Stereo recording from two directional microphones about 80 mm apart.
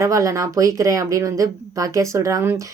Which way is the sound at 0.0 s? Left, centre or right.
Right.